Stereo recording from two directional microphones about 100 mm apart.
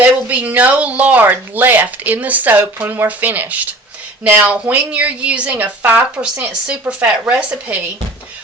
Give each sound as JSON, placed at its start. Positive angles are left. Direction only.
{"t": 0.0, "sound": "speech", "side_deg": -15}